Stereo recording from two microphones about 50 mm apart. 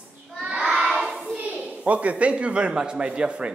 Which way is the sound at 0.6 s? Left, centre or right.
Centre.